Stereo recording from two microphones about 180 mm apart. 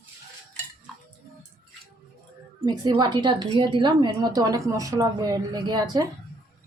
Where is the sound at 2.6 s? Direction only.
20° right (ahead or behind).